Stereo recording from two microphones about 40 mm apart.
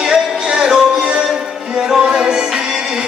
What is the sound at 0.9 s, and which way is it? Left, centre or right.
Music, right.